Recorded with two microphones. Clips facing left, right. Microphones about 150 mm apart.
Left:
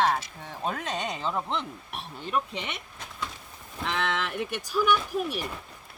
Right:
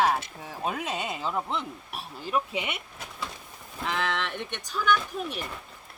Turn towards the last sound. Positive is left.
turn(degrees=5)  # may be behind; listen again after turning